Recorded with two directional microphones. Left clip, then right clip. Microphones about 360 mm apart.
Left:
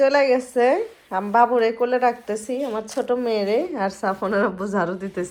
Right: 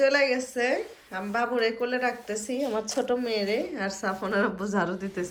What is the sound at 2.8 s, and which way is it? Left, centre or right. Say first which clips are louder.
Speech: left 3 dB; right.